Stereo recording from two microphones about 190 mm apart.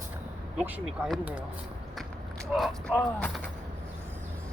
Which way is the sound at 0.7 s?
5° right (ahead or behind).